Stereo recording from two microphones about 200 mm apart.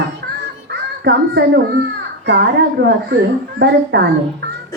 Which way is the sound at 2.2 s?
55° right (ahead or behind).